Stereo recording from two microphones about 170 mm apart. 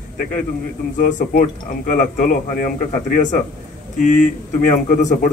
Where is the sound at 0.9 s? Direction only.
50° left (ahead or behind).